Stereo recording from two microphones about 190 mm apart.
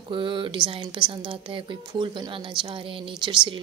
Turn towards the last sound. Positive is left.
turn(degrees=-25)  # may be behind; listen again after turning